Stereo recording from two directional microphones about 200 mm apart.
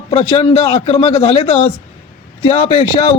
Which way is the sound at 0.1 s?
30° left (ahead or behind).